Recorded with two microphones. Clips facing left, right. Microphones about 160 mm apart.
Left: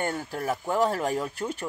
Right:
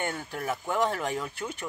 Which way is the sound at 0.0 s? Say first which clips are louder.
Left 3 dB; 35° left (ahead or behind).